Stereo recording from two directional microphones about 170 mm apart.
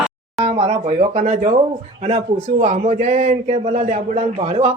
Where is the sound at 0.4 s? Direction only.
40° right (ahead or behind).